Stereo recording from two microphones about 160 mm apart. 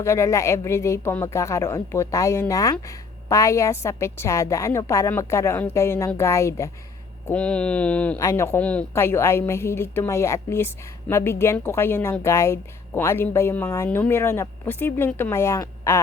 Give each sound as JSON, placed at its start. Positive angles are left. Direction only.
{"t": 0.0, "sound": "speech", "side_deg": 20}
{"t": 7.3, "sound": "speech", "side_deg": 5}